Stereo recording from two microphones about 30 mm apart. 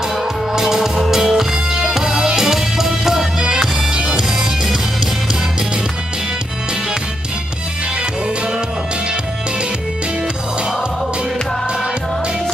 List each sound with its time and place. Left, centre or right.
0.5 s music: centre
3.4 s music: right
4.2 s music: centre